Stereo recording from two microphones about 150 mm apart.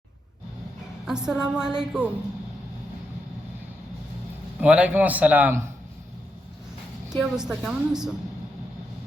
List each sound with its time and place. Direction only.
1.0 s a woman's voice: 5° right (ahead or behind)
4.6 s a man's voice: 10° right (ahead or behind)
7.2 s a woman's voice: 5° right (ahead or behind)